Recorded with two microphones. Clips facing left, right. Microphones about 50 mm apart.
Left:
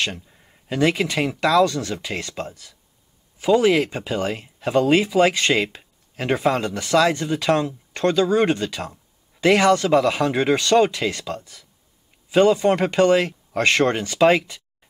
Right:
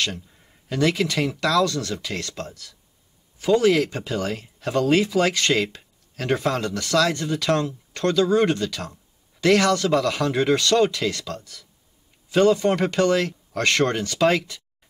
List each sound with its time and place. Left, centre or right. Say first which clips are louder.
0.7 s speech: left 2 dB; left